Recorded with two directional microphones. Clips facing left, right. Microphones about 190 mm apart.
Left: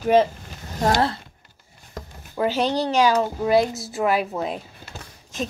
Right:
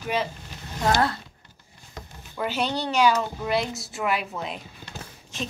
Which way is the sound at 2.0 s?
40° left (ahead or behind).